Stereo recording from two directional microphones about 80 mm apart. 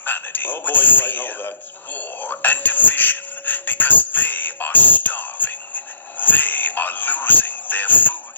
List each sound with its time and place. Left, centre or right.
0.0 s a man's voice: left